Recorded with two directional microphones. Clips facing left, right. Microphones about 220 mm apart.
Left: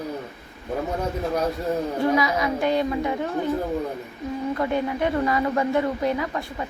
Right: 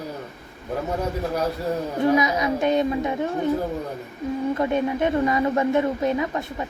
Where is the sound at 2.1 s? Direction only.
20° right (ahead or behind).